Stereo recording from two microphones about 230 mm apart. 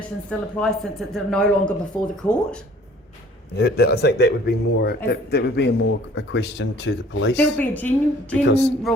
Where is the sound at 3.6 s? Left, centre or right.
Left.